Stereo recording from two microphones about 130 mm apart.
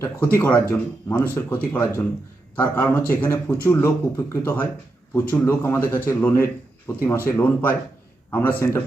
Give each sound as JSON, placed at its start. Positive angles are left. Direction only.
{"t": 0.0, "sound": "a man's voice", "side_deg": 15}